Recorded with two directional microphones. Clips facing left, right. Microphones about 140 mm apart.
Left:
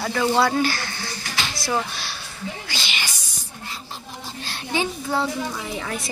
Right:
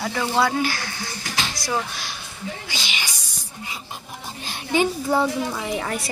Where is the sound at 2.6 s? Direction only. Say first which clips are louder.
Even; centre (ahead or behind).